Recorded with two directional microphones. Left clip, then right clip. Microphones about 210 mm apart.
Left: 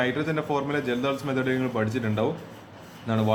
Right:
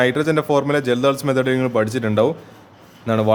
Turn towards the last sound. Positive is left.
turn(degrees=-45)  # may be behind; listen again after turning